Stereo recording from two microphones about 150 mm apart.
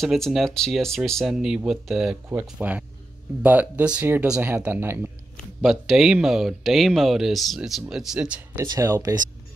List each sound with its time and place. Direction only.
0.0 s speech: centre (ahead or behind)
5.6 s speech: centre (ahead or behind)
8.5 s speech: 20° right (ahead or behind)